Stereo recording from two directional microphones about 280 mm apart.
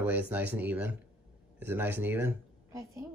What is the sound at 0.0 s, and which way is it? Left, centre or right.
A woman's voice, centre.